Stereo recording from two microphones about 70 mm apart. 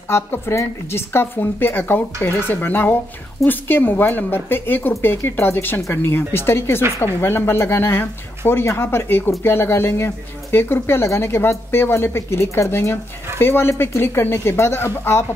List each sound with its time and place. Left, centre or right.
0.1 s speech: left